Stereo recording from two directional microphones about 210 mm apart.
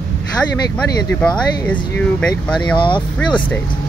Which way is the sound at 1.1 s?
5° left (ahead or behind).